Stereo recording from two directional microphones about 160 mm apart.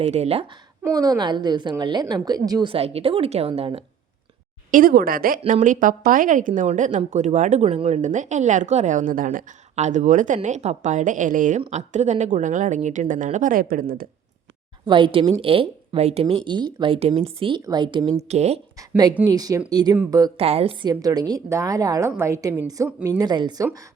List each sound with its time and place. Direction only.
0.0 s a woman's voice: 40° right (ahead or behind)
0.9 s a woman's voice: 20° right (ahead or behind)
2.7 s a woman's voice: 40° right (ahead or behind)
4.7 s speech: 60° right (ahead or behind)
14.8 s a woman's voice: 30° right (ahead or behind)
16.2 s a woman's voice: 30° right (ahead or behind)
18.3 s speech: 45° right (ahead or behind)
18.8 s a woman's voice: 25° right (ahead or behind)
20.3 s a woman's voice: 40° right (ahead or behind)
20.8 s a woman's voice: 25° right (ahead or behind)